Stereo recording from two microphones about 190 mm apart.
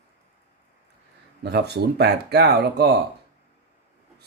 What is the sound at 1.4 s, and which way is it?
Speech, 60° right (ahead or behind).